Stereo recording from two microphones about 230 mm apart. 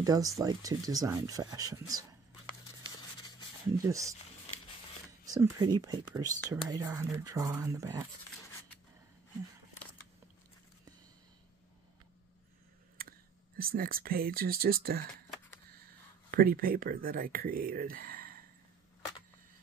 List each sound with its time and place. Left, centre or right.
0.0 s speech: centre
2.8 s a sound: centre
3.7 s speech: centre
5.2 s speech: centre
13.6 s speech: right
16.3 s speech: right